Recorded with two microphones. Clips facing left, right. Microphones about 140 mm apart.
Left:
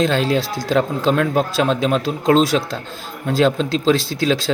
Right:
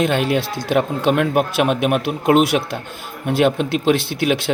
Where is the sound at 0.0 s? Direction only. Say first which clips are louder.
Even; 15° right (ahead or behind).